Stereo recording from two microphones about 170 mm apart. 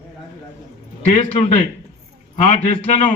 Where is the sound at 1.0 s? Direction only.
35° left (ahead or behind).